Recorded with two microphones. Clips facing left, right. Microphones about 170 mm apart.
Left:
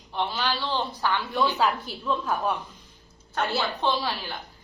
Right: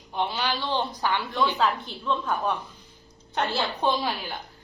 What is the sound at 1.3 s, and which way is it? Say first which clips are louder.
Speech: left 1 dB; 10° left (ahead or behind).